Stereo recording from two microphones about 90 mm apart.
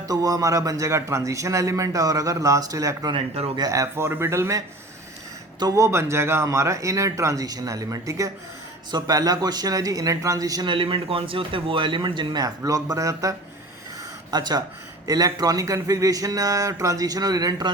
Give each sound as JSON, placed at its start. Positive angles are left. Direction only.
{"t": 0.1, "sound": "a man's voice", "side_deg": -40}
{"t": 3.1, "sound": "speech", "side_deg": -90}
{"t": 3.7, "sound": "a man's voice", "side_deg": -35}
{"t": 8.9, "sound": "speech", "side_deg": -50}
{"t": 10.7, "sound": "speech", "side_deg": -75}
{"t": 12.4, "sound": "a man's voice", "side_deg": -40}
{"t": 14.3, "sound": "a man's voice", "side_deg": -50}